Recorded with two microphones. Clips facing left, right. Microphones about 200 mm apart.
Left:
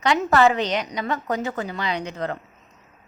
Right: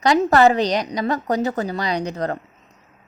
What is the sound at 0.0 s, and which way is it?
A woman's voice, 35° right (ahead or behind).